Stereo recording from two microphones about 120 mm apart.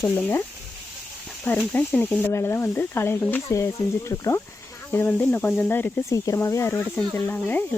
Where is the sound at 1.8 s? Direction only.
15° left (ahead or behind).